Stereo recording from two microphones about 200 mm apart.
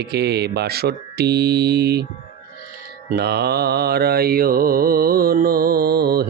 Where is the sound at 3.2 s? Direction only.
55° right (ahead or behind).